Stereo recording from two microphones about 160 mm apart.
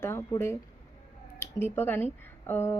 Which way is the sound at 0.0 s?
15° left (ahead or behind).